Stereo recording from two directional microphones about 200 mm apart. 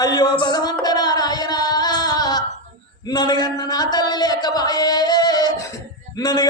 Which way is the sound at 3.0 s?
20° left (ahead or behind).